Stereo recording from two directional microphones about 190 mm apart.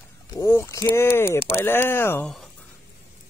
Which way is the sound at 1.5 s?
10° left (ahead or behind).